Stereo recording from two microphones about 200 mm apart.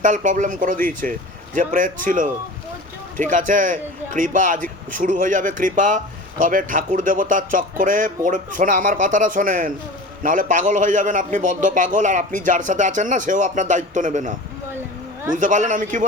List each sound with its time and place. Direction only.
0.0 s a man's voice: 40° right (ahead or behind)